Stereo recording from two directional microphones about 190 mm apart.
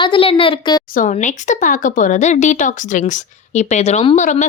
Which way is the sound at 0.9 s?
40° left (ahead or behind).